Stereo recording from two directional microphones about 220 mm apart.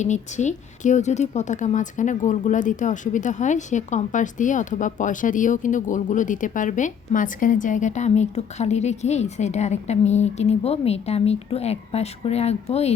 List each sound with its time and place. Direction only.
0.0 s a woman's voice: 35° left (ahead or behind)